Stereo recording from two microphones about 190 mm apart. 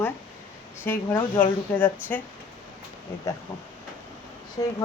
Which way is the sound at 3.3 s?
15° left (ahead or behind).